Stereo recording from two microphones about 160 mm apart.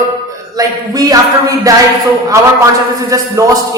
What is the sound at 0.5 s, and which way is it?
A man's voice, 25° right (ahead or behind).